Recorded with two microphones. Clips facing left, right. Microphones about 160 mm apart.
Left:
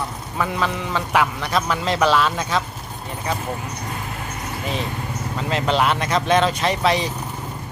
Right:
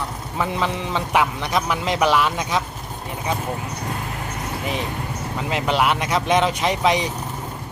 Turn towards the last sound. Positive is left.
turn(degrees=-15)  # may be behind; listen again after turning